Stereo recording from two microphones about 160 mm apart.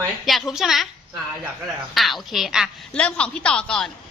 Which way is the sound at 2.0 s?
Centre (ahead or behind).